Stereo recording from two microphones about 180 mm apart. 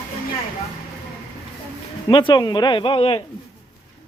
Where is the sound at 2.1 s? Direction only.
25° left (ahead or behind).